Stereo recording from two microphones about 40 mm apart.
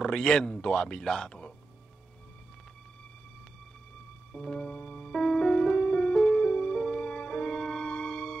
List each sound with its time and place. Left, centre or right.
0.0 s speech: centre
0.9 s speech: centre
4.3 s music: centre
6.3 s music: left
6.8 s music: centre
7.1 s music: left
7.4 s music: centre
7.9 s music: left